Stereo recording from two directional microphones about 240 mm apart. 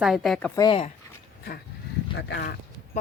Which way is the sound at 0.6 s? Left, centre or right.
Left.